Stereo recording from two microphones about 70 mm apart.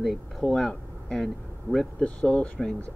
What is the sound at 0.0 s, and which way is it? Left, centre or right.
Speech, centre.